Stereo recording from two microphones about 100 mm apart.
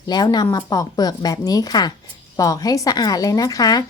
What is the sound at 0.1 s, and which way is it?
A woman's voice, 40° left (ahead or behind).